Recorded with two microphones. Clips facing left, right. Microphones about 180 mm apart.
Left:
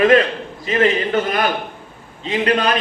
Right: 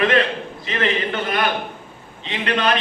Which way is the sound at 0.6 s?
40° left (ahead or behind).